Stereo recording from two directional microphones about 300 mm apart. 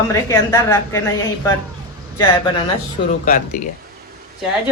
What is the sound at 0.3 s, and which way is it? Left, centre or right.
A woman's voice, centre.